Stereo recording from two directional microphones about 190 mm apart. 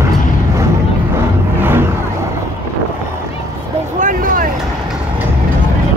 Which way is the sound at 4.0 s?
45° right (ahead or behind).